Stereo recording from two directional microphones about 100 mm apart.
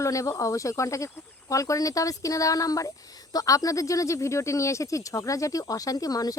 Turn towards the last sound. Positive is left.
turn(degrees=40)  # may be behind; listen again after turning